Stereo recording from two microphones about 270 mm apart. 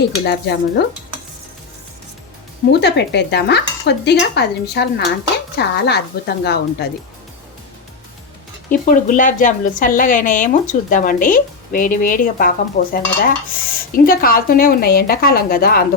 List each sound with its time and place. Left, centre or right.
0.3 s a woman's voice: left
2.8 s a woman's voice: left
8.7 s a woman's voice: left